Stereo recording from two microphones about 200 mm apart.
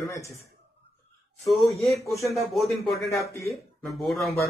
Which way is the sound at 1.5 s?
Centre (ahead or behind).